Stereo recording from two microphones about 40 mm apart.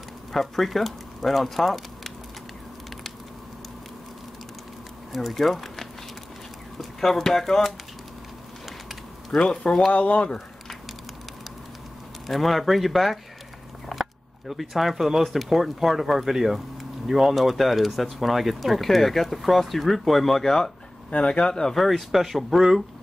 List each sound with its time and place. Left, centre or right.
0.3 s speech: centre
5.1 s speech: centre
9.3 s speech: centre
9.9 s speech: left
12.3 s speech: centre
13.9 s a sound: centre
14.5 s speech: centre
21.1 s speech: left
21.7 s speech: centre